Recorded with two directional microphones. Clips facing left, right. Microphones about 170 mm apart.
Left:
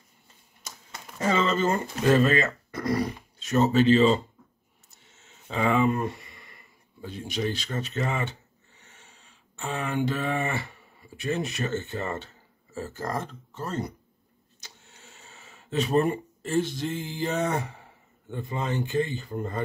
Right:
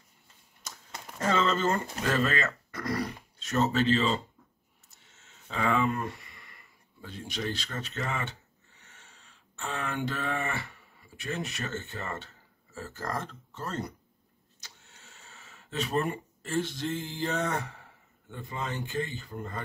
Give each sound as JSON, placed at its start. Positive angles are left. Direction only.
{"t": 0.7, "sound": "a sound", "side_deg": 5}
{"t": 2.0, "sound": "speech", "side_deg": 15}
{"t": 5.5, "sound": "speech", "side_deg": 20}
{"t": 15.1, "sound": "speech", "side_deg": 20}